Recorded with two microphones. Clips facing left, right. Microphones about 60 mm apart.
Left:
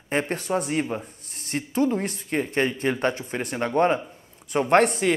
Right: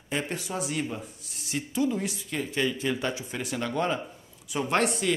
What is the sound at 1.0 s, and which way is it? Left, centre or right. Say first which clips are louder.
A man's voice: left 1 dB; left.